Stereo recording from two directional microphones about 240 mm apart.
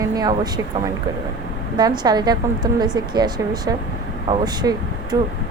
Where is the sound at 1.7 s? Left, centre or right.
Centre.